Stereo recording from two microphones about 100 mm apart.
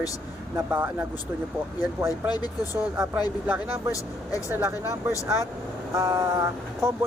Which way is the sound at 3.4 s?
15° right (ahead or behind).